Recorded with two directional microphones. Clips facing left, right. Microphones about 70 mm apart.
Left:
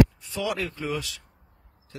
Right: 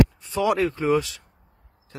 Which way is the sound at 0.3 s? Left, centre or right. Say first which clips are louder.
Right 7 dB; right.